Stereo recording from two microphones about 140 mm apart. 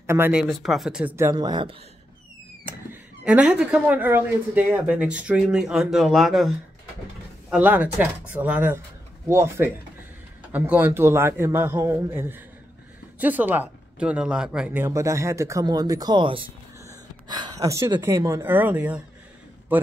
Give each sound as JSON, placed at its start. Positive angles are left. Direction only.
{"t": 0.0, "sound": "speech", "side_deg": -20}
{"t": 0.3, "sound": "speech", "side_deg": -5}
{"t": 1.3, "sound": "speech", "side_deg": -30}
{"t": 2.6, "sound": "speech", "side_deg": -10}
{"t": 7.5, "sound": "speech", "side_deg": -10}
{"t": 14.8, "sound": "speech", "side_deg": -20}
{"t": 16.8, "sound": "gasp", "side_deg": -30}
{"t": 18.0, "sound": "a man's voice", "side_deg": -20}